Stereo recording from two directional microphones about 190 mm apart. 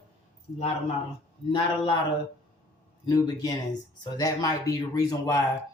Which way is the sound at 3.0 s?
20° left (ahead or behind).